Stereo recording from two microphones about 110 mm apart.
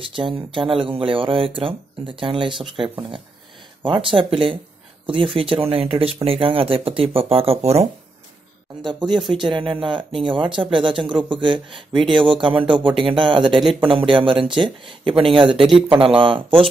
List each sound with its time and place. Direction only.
0.0 s speech: 50° right (ahead or behind)
3.8 s speech: 50° right (ahead or behind); by 7.8 s 70° right (ahead or behind)
8.8 s speech: 45° right (ahead or behind)